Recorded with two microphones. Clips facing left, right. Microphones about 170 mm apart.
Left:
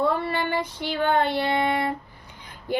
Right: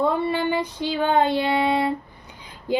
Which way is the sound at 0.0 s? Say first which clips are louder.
Right 2 dB; 15° right (ahead or behind).